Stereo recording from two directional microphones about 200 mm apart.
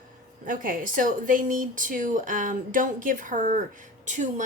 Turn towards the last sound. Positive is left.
turn(degrees=-40)  # may be behind; listen again after turning